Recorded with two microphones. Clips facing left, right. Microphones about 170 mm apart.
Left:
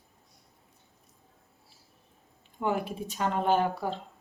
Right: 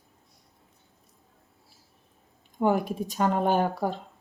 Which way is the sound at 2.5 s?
40° right (ahead or behind).